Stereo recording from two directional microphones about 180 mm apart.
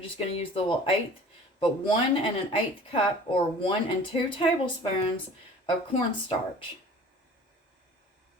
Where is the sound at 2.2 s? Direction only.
30° left (ahead or behind).